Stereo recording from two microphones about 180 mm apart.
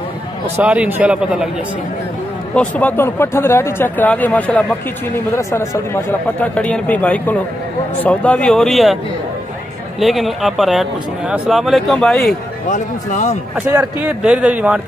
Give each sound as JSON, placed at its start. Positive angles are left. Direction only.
{"t": 0.6, "sound": "a man's voice", "side_deg": -10}
{"t": 2.5, "sound": "speech", "side_deg": 5}
{"t": 9.9, "sound": "speech", "side_deg": 0}
{"t": 12.6, "sound": "speech", "side_deg": 40}
{"t": 13.6, "sound": "a man's voice", "side_deg": -15}